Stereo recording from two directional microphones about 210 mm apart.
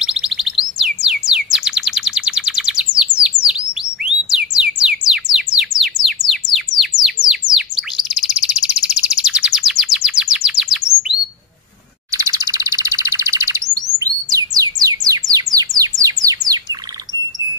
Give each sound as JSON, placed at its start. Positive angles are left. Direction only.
{"t": 0.0, "sound": "a sound", "side_deg": -5}
{"t": 3.2, "sound": "bird", "side_deg": -5}
{"t": 4.6, "sound": "music", "side_deg": -5}
{"t": 12.1, "sound": "chirp", "side_deg": -15}
{"t": 13.9, "sound": "bird", "side_deg": -15}